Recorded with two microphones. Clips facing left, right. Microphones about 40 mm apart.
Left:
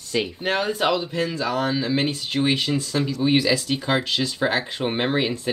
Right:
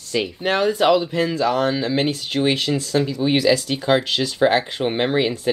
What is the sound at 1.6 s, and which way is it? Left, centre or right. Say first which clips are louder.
Speech: right 3 dB; centre.